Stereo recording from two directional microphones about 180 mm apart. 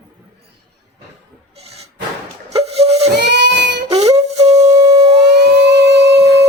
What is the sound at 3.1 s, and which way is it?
Baby cry, 70° right (ahead or behind).